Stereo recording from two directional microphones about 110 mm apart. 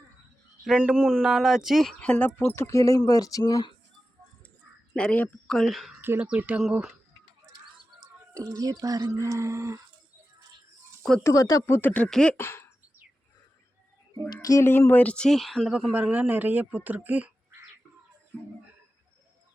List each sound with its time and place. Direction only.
0.6 s speech: 5° right (ahead or behind)
2.0 s speech: 15° left (ahead or behind)
2.5 s speech: 30° left (ahead or behind)
4.9 s speech: 10° left (ahead or behind)
5.5 s speech: centre (ahead or behind)
6.0 s speech: 15° right (ahead or behind)
8.3 s speech: 30° right (ahead or behind)
11.2 s speech: 30° left (ahead or behind)
11.6 s speech: 20° left (ahead or behind)
12.4 s speech: 20° left (ahead or behind)
14.4 s speech: 30° left (ahead or behind)
14.7 s speech: 20° left (ahead or behind); by 17.6 s 15° right (ahead or behind)